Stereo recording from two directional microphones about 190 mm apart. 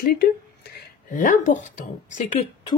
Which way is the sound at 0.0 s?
55° left (ahead or behind).